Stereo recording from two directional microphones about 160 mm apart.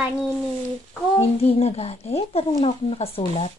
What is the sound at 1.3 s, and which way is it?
Speech, 40° left (ahead or behind).